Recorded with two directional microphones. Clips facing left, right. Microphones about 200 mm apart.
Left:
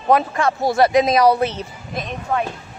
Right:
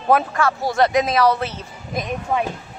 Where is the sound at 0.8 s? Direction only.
5° left (ahead or behind).